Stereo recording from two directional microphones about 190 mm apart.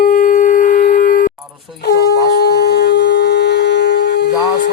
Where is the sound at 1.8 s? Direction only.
60° left (ahead or behind).